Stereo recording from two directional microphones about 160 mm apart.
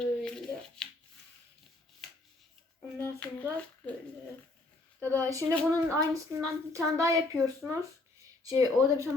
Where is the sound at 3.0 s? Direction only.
10° left (ahead or behind).